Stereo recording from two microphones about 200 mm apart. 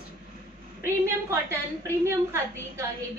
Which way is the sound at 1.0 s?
15° right (ahead or behind).